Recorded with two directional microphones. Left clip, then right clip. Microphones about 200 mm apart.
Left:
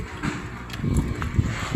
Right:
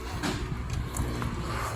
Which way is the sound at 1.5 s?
45° left (ahead or behind).